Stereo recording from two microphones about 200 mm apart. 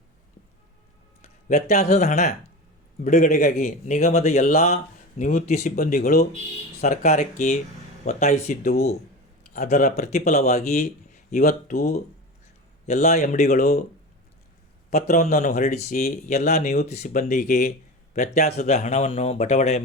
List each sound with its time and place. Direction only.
1.5 s speech: 35° left (ahead or behind)
6.8 s speech: 35° left (ahead or behind)
8.6 s speech: 50° left (ahead or behind)
9.5 s speech: 40° left (ahead or behind)
12.9 s speech: 35° left (ahead or behind)
14.8 s speech: 35° left (ahead or behind)